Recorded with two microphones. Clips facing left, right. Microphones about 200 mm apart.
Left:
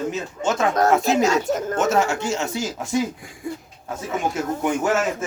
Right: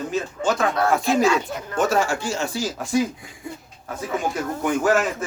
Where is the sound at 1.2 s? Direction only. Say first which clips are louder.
Left 1 dB; 45° left (ahead or behind).